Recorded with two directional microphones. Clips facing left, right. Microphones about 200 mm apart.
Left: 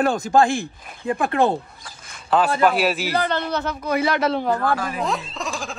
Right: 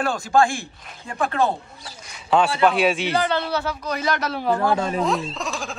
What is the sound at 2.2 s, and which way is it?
Speech, centre (ahead or behind).